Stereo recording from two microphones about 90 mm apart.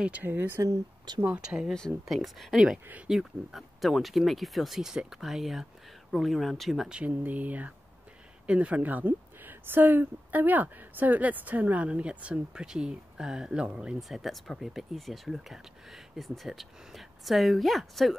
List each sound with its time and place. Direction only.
0.0 s speech: 20° right (ahead or behind)
0.7 s speech: 50° right (ahead or behind)
1.2 s speech: 10° right (ahead or behind)
2.0 s speech: centre (ahead or behind)
7.0 s speech: 15° right (ahead or behind); by 18.1 s centre (ahead or behind)